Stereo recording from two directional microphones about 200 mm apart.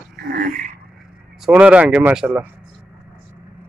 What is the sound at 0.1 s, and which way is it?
Dog, 50° right (ahead or behind).